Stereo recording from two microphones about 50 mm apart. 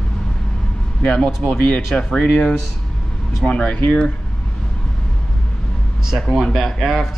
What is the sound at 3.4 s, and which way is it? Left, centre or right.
Speech, left.